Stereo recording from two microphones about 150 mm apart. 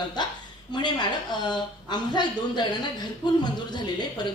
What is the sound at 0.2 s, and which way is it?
A woman's voice, 30° left (ahead or behind).